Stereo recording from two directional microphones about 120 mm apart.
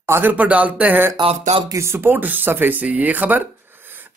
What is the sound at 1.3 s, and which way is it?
Speech, 75° right (ahead or behind).